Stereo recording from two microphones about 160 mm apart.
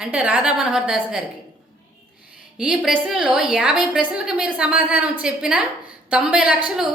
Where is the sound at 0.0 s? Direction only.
10° right (ahead or behind).